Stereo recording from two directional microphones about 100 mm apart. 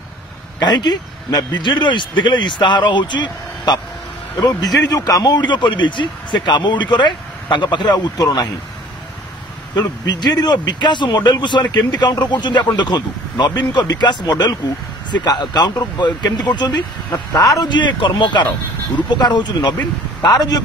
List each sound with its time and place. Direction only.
0.6 s a man's voice: 45° left (ahead or behind)
9.8 s a man's voice: 45° left (ahead or behind)
17.3 s speech: 35° left (ahead or behind)
17.6 s a man's voice: 50° left (ahead or behind)